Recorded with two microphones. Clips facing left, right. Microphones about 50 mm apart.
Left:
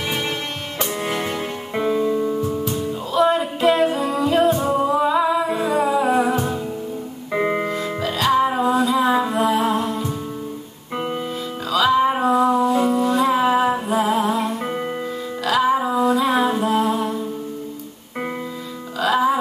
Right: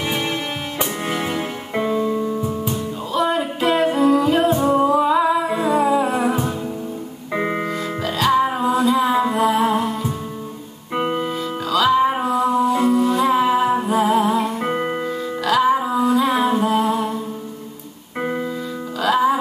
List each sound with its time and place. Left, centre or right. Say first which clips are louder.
0.7 s music: left 1 dB; centre
7.3 s music: left 1 dB; centre
11.0 s music: right 4 dB; right
11.7 s music: even; centre
12.6 s music: right 1 dB; centre
14.6 s music: right 3 dB; right
15.0 s music: right 2 dB; centre
18.9 s music: right 1 dB; centre